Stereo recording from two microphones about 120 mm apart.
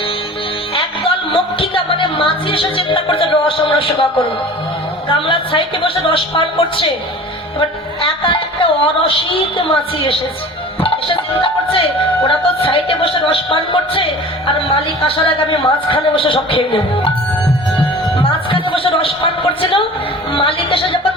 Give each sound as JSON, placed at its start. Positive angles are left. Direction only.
{"t": 0.8, "sound": "music", "side_deg": 45}
{"t": 5.0, "sound": "a woman's voice", "side_deg": 45}
{"t": 8.0, "sound": "a woman's voice", "side_deg": 50}
{"t": 18.2, "sound": "a sound", "side_deg": 45}
{"t": 20.3, "sound": "speech", "side_deg": 50}